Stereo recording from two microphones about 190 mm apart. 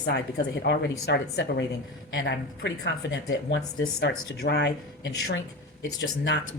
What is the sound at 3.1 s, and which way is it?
A woman's voice, 65° left (ahead or behind).